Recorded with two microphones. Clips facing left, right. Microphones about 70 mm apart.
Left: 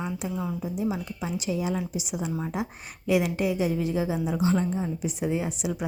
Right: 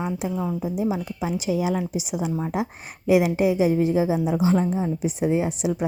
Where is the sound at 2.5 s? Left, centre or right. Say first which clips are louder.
Right 5 dB; right.